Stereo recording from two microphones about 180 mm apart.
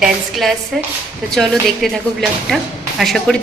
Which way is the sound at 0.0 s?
Centre (ahead or behind).